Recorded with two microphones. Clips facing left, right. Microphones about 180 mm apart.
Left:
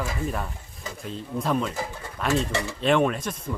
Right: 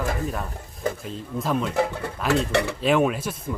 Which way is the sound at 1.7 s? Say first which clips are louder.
Right 9 dB; 65° right (ahead or behind).